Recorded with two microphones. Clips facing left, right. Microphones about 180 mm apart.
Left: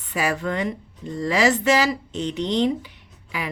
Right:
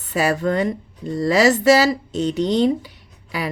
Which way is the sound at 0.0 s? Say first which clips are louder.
Right 5 dB; 40° right (ahead or behind).